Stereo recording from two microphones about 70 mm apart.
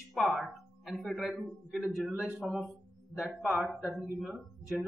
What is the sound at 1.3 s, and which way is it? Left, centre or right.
Speech, centre.